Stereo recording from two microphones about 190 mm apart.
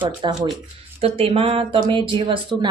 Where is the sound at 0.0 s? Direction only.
25° right (ahead or behind).